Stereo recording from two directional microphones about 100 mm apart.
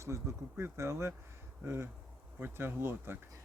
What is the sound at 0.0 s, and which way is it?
Speech, 25° right (ahead or behind).